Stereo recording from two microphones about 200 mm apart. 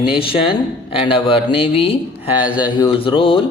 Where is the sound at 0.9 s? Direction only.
25° left (ahead or behind).